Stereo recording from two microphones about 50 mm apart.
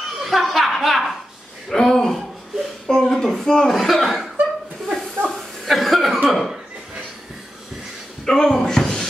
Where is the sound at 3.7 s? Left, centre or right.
Centre.